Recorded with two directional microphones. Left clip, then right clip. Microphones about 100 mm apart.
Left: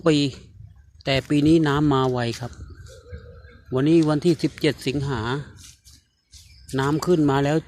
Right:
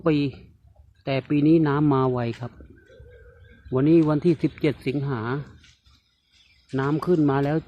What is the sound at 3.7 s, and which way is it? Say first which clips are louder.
Speech: even; 20° right (ahead or behind).